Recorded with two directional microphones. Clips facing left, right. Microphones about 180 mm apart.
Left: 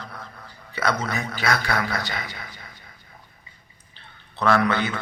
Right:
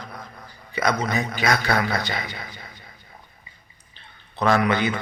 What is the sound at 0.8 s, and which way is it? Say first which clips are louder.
A man's voice: right 2 dB; 15° right (ahead or behind).